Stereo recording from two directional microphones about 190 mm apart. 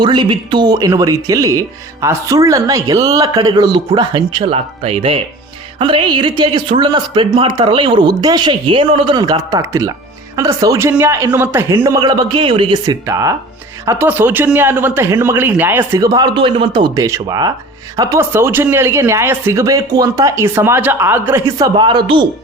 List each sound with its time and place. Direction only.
0.0 s speech: 25° right (ahead or behind)